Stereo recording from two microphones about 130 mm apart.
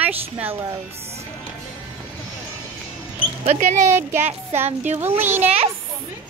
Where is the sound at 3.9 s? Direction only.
20° right (ahead or behind).